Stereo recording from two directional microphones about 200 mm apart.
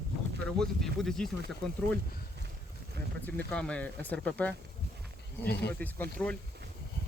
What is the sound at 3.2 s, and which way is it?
Speech, 5° left (ahead or behind).